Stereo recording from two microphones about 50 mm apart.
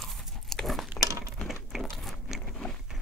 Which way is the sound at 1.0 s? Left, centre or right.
Right.